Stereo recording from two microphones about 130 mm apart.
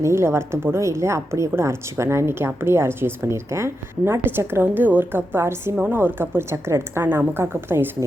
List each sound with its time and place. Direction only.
0.0 s speech: 20° right (ahead or behind)